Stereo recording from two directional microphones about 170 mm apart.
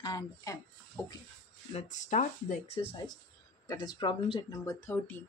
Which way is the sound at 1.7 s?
40° left (ahead or behind).